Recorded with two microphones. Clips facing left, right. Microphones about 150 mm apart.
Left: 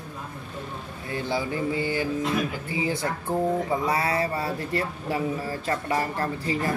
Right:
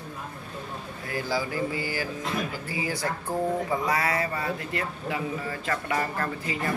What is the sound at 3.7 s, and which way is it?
Speech, 30° left (ahead or behind).